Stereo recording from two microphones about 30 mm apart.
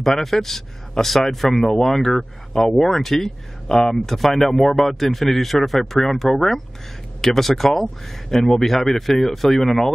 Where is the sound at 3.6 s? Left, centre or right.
Left.